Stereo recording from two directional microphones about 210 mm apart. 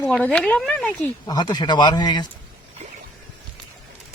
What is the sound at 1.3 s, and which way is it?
A man's voice, 20° left (ahead or behind).